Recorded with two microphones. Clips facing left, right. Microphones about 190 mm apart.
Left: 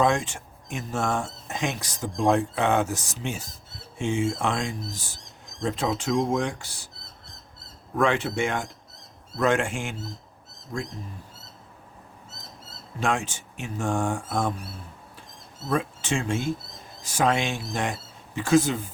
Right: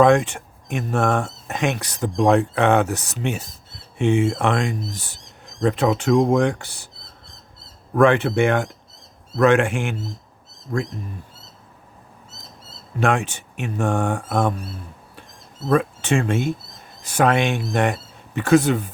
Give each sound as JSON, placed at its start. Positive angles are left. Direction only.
{"t": 0.0, "sound": "speech", "side_deg": -60}
{"t": 7.9, "sound": "speech", "side_deg": -60}
{"t": 13.0, "sound": "speech", "side_deg": -60}
{"t": 15.7, "sound": "speech", "side_deg": -60}